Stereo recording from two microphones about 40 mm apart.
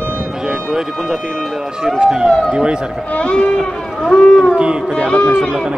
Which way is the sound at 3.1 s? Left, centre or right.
Left.